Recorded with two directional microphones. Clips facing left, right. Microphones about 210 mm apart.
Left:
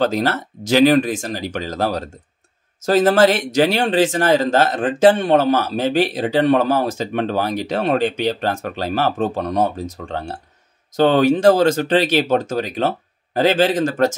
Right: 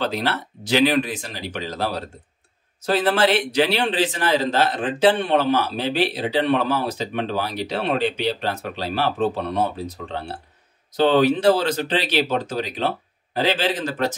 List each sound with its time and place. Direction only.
0.0 s speech: 45° left (ahead or behind)